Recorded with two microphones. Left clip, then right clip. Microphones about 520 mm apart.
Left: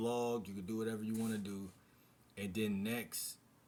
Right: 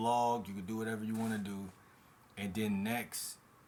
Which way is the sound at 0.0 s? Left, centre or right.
Left.